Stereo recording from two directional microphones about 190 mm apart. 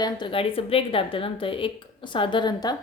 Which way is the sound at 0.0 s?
25° left (ahead or behind).